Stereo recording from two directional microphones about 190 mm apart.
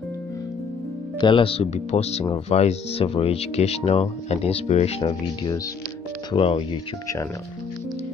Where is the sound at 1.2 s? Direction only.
30° left (ahead or behind).